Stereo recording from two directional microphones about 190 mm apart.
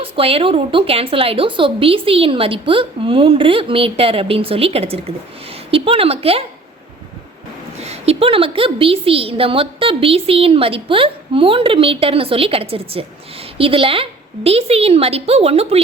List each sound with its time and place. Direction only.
0.0 s a woman's voice: 30° right (ahead or behind)
7.8 s a woman's voice: 35° right (ahead or behind)